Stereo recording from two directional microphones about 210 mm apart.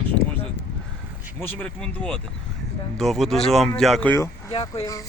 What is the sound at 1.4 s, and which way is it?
Speech, 10° left (ahead or behind).